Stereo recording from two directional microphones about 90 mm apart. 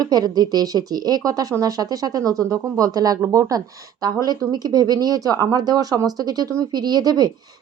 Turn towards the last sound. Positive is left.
turn(degrees=-45)  # may be behind; listen again after turning